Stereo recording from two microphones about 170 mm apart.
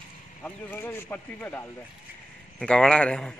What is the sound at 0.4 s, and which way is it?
A man's voice, 10° left (ahead or behind).